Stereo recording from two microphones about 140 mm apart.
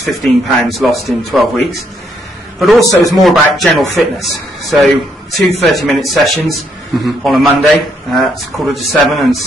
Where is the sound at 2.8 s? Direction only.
25° left (ahead or behind).